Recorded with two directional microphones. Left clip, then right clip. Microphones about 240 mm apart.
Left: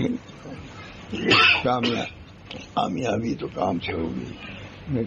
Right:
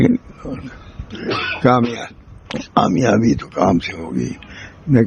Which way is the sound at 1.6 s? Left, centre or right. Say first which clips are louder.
Right 8 dB; right.